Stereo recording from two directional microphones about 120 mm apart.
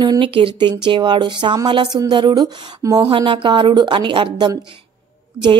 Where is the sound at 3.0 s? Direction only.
45° right (ahead or behind).